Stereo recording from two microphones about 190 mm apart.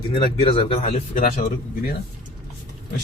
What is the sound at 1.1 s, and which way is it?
Speech, 50° left (ahead or behind).